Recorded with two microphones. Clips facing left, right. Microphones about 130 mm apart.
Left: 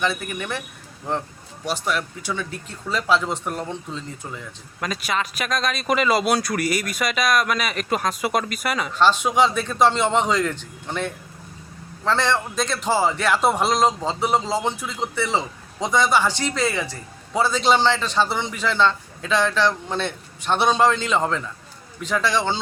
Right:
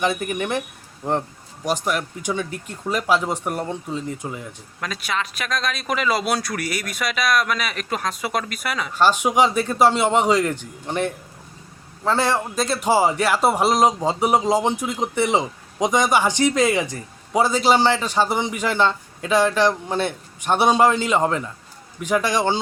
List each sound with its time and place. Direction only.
0.0 s a man's voice: 20° right (ahead or behind)
1.7 s a man's voice: 10° right (ahead or behind)
4.8 s a man's voice: centre (ahead or behind)
8.9 s a man's voice: 10° right (ahead or behind)